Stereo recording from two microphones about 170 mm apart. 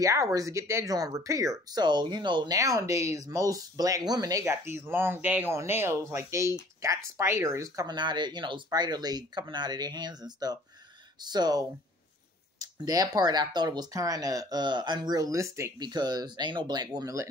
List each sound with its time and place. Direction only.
0.0 s speech: 20° right (ahead or behind)